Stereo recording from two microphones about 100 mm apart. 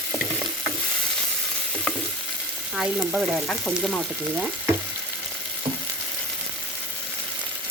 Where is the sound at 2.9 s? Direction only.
10° right (ahead or behind).